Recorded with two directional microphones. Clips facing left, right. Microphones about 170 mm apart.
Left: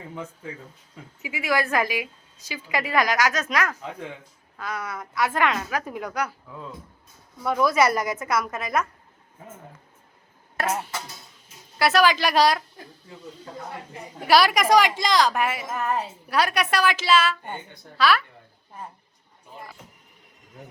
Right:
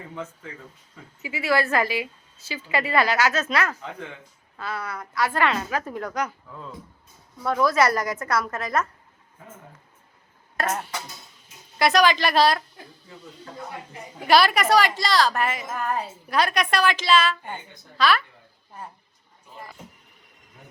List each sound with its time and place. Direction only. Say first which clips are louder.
1.2 s a woman's voice: right 2 dB; 15° left (ahead or behind)
10.6 s a woman's voice: even; 5° left (ahead or behind)
14.3 s a woman's voice: even; 10° left (ahead or behind)